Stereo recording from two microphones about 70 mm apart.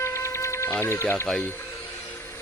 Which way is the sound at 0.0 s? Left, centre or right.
Left.